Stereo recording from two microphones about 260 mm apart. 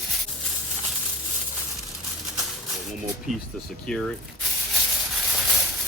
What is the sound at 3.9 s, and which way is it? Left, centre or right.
Speech, centre.